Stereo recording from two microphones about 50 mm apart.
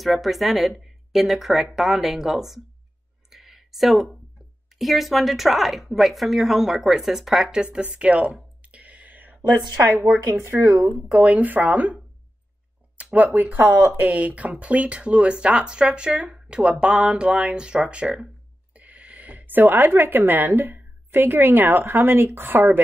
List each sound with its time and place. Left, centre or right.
0.0 s a woman's voice: centre
3.3 s a sound: centre
4.7 s a woman's voice: centre; by 8.4 s right
8.6 s a sound: right
10.2 s speech: right
10.6 s speech: right
11.1 s speech: right